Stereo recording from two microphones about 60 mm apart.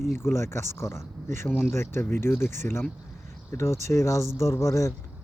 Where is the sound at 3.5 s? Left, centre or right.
Left.